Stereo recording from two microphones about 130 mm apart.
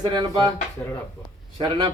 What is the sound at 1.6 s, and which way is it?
Speech, 45° right (ahead or behind).